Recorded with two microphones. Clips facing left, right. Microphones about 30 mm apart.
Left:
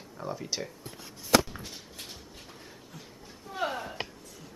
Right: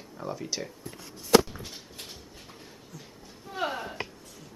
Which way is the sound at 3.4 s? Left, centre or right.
Centre.